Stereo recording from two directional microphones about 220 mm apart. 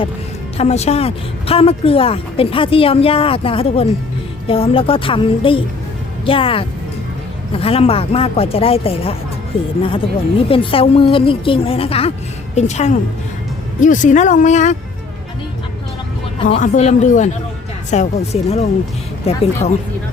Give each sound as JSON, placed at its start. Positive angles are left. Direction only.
{"t": 0.5, "sound": "speech", "side_deg": 30}
{"t": 16.4, "sound": "speech", "side_deg": 30}